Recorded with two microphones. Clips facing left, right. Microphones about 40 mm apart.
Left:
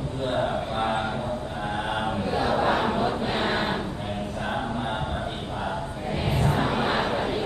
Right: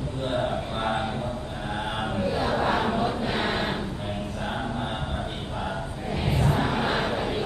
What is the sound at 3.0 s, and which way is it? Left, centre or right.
Chant, left.